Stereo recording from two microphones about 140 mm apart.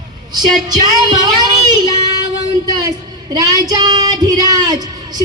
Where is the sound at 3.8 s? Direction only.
30° right (ahead or behind).